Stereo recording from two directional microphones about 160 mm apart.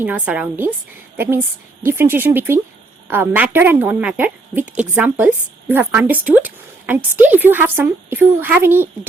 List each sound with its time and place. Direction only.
0.0 s speech: 10° right (ahead or behind)